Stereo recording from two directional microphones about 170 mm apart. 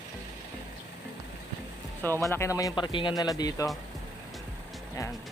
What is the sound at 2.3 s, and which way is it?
Speech, 15° left (ahead or behind).